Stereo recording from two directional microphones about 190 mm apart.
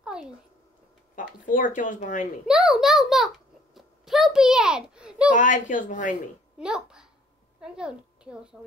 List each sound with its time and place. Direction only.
0.0 s cat: 5° right (ahead or behind)
1.1 s speech: 45° left (ahead or behind)
2.4 s a child's voice: 5° right (ahead or behind)
3.7 s a sound: centre (ahead or behind)
5.3 s speech: 45° left (ahead or behind)
6.6 s a child's voice: 5° right (ahead or behind)